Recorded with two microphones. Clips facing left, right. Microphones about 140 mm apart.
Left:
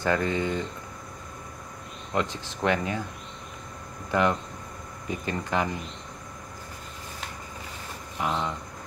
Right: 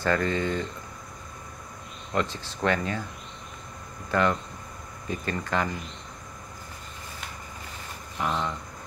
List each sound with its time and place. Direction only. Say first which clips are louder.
0.0 s speech: even; 15° left (ahead or behind)
2.1 s speech: even; 15° left (ahead or behind)
4.1 s speech: even; 15° left (ahead or behind)
8.2 s speech: even; 10° left (ahead or behind)